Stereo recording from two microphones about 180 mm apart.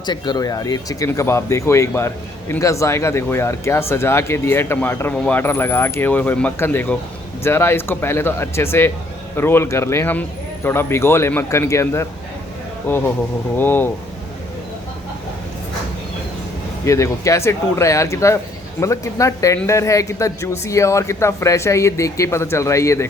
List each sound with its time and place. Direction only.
0.0 s speech: 25° left (ahead or behind)
16.8 s speech: 15° left (ahead or behind)